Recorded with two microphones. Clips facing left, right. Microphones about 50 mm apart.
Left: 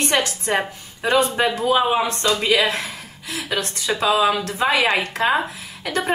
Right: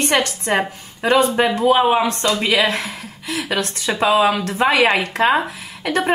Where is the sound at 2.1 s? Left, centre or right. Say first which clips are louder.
Right 1 dB; right.